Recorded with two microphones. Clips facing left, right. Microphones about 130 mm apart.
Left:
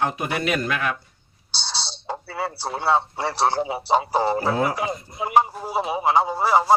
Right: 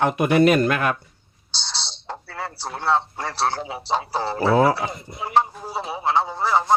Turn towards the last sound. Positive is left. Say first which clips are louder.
# left 2 dB
turn(degrees=10)  # may be behind; listen again after turning